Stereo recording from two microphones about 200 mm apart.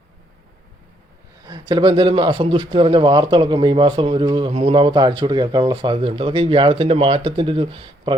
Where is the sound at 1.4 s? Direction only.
20° right (ahead or behind).